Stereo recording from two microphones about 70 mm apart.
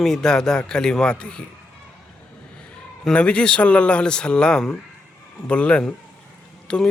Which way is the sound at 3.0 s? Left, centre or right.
Centre.